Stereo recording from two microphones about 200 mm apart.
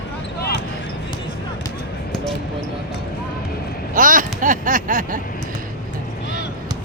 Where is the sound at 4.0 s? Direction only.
40° right (ahead or behind).